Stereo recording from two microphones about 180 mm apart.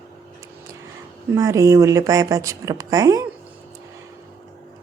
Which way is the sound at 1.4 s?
20° right (ahead or behind).